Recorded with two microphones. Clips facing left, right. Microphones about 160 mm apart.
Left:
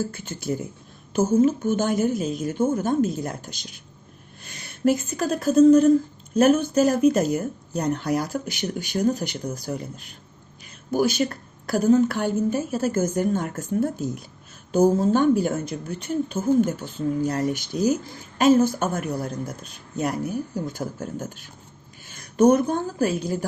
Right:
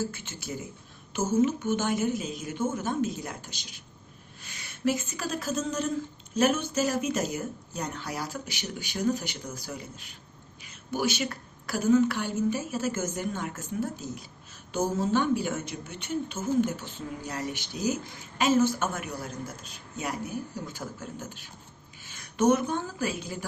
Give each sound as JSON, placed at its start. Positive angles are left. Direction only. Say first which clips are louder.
{"t": 0.1, "sound": "a woman's voice", "louder": "left 9 dB", "side_deg": 45}